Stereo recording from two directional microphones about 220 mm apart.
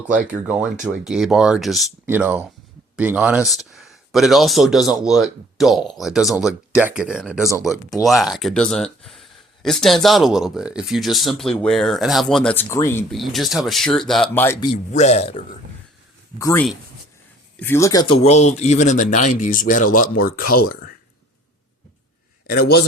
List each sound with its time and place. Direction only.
0.4 s speech: 5° right (ahead or behind); by 13.1 s 10° left (ahead or behind)
13.1 s speech: centre (ahead or behind)
14.4 s a man's voice: 20° left (ahead or behind)
14.9 s a man's voice: 30° left (ahead or behind)
16.4 s speech: 15° left (ahead or behind); by 20.9 s 40° left (ahead or behind)
22.5 s a man's voice: 45° left (ahead or behind)